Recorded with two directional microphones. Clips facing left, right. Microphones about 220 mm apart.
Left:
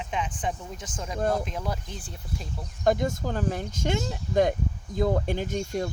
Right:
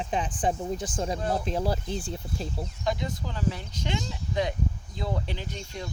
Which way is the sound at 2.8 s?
50° left (ahead or behind).